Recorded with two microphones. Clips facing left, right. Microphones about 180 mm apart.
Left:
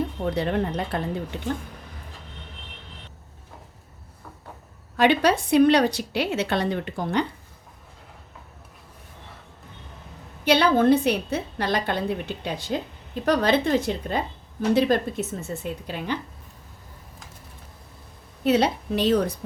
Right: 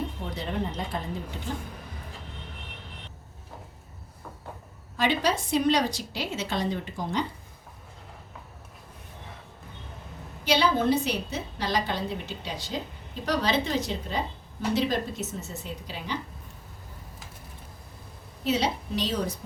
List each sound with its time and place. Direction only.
0.3 s a woman's voice: 65° left (ahead or behind)
4.9 s a woman's voice: 65° left (ahead or behind)
10.4 s a woman's voice: 60° left (ahead or behind)
18.4 s a woman's voice: 60° left (ahead or behind)